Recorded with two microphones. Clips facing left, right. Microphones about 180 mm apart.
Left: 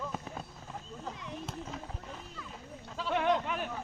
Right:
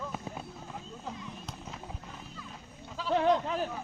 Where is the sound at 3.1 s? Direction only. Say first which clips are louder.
Right 3 dB; 30° right (ahead or behind).